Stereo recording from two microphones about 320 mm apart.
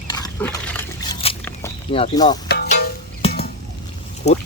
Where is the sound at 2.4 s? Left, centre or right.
Left.